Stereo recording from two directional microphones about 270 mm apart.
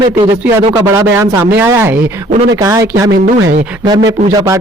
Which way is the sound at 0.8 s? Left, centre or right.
Centre.